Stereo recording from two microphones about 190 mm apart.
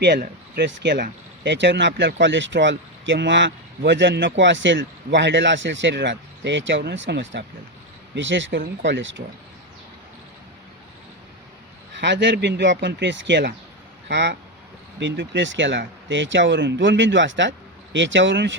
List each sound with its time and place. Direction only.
0.0 s speech: 60° right (ahead or behind); by 9.2 s 75° right (ahead or behind)
11.9 s speech: 65° right (ahead or behind)